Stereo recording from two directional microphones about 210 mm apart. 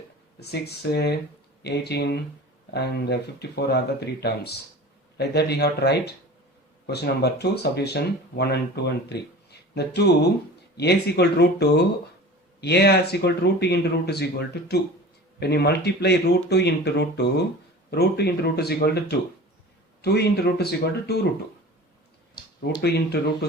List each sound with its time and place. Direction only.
0.3 s speech: 50° left (ahead or behind)
22.8 s speech: 50° left (ahead or behind)